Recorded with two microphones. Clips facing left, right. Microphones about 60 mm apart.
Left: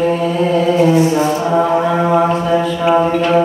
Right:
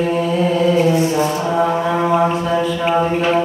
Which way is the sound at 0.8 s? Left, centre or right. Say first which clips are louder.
Left 3 dB; left.